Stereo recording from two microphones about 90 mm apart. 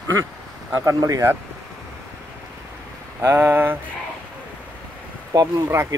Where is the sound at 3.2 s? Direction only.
30° right (ahead or behind).